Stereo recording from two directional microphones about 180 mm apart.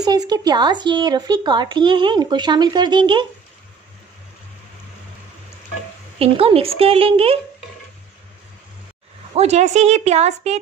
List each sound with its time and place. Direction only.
0.0 s speech: 20° right (ahead or behind)
6.1 s a woman's voice: 30° right (ahead or behind)
9.3 s a woman's voice: 35° right (ahead or behind)